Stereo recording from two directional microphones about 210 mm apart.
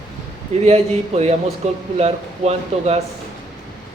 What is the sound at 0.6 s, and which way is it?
A man's voice, 30° right (ahead or behind).